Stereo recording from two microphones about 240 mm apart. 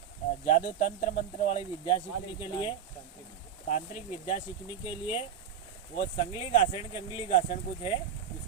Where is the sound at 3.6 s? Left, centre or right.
Left.